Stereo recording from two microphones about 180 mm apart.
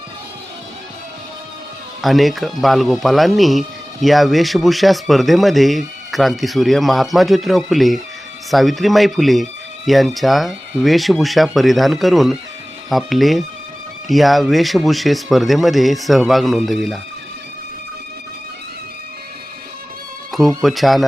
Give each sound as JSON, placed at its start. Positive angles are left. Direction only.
{"t": 2.0, "sound": "speech", "side_deg": 0}
{"t": 20.6, "sound": "speech", "side_deg": 0}